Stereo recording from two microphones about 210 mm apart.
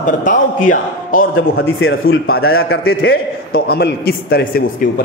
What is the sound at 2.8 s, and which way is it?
A man's voice, 45° left (ahead or behind).